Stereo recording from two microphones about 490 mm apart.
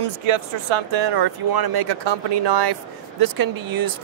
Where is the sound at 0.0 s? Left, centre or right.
Right.